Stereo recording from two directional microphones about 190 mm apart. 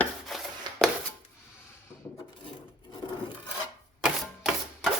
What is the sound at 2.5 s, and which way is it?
Filing, 25° left (ahead or behind).